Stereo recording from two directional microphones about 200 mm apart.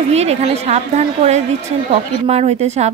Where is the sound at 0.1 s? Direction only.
30° right (ahead or behind).